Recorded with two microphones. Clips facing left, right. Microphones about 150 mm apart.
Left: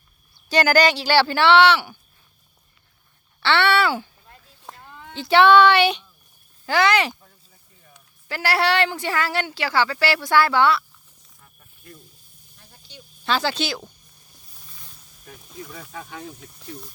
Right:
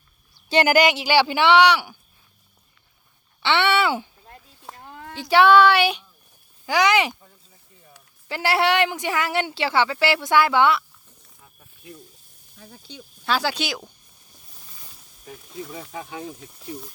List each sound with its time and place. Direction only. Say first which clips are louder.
0.4 s speech: even; 25° right (ahead or behind)
3.4 s speech: left 1 dB; 15° right (ahead or behind)
5.1 s speech: left 1 dB; 10° right (ahead or behind)
8.3 s speech: right 1 dB; 20° right (ahead or behind)
13.2 s speech: left 1 dB; 10° right (ahead or behind)
15.8 s speech: right 3 dB; 15° right (ahead or behind)